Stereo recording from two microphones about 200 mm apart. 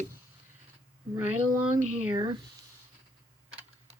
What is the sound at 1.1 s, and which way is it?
Speech, 10° right (ahead or behind).